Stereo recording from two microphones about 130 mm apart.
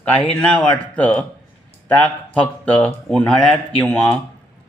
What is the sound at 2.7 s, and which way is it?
Speech, 10° left (ahead or behind).